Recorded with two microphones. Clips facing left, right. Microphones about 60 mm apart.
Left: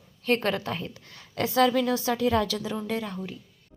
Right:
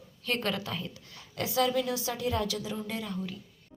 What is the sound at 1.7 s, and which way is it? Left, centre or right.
A woman's voice, left.